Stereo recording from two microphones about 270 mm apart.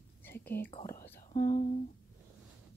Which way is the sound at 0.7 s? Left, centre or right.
Centre.